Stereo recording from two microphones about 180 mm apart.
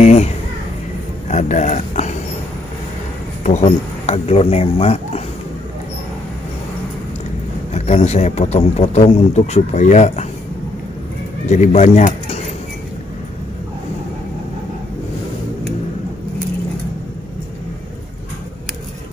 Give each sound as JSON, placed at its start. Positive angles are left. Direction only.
{"t": 0.0, "sound": "a sound", "side_deg": 35}
{"t": 1.3, "sound": "speech", "side_deg": 40}
{"t": 3.4, "sound": "speech", "side_deg": 35}
{"t": 7.7, "sound": "speech", "side_deg": 35}
{"t": 11.4, "sound": "speech", "side_deg": 40}